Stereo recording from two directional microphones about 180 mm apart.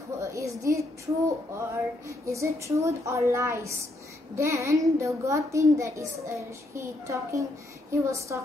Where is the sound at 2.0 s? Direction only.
15° right (ahead or behind).